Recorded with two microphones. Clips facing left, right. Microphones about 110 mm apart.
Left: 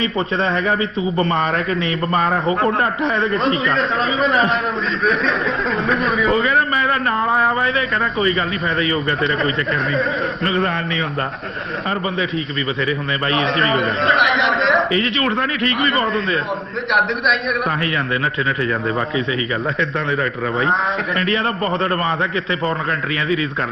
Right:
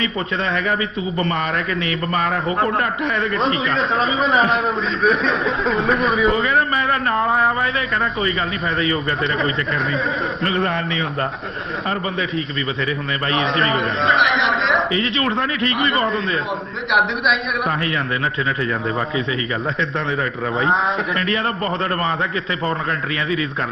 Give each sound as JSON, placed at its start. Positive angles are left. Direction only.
{"t": 0.0, "sound": "a man's voice", "side_deg": 35}
{"t": 3.6, "sound": "a man's voice", "side_deg": 0}
{"t": 13.4, "sound": "a man's voice", "side_deg": 0}
{"t": 21.2, "sound": "a man's voice", "side_deg": 35}